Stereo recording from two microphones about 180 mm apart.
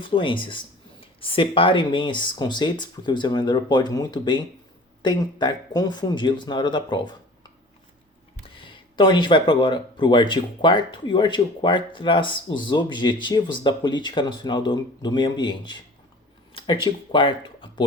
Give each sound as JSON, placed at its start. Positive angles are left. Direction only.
{"t": 0.0, "sound": "speech", "side_deg": 30}
{"t": 8.6, "sound": "speech", "side_deg": 25}